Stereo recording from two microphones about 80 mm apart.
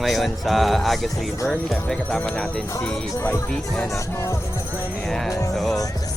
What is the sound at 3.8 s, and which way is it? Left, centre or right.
Speech, left.